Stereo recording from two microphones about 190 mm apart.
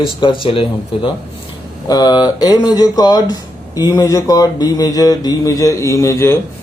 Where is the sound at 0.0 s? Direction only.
25° left (ahead or behind).